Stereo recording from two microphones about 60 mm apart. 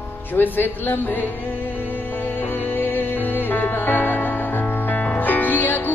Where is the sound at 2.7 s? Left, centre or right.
Left.